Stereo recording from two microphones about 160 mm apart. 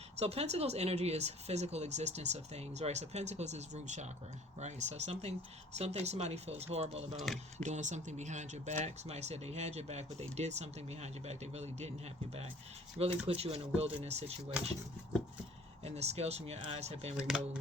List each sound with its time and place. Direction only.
0.2 s speech: 40° right (ahead or behind)
13.0 s speech: 40° right (ahead or behind)
15.8 s speech: 40° right (ahead or behind)
17.2 s speech: 5° right (ahead or behind)